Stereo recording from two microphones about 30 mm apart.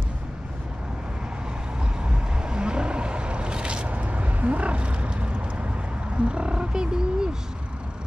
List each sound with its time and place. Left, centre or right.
2.0 s vehicle: right
3.9 s roaring cats: right
6.1 s wild animals: right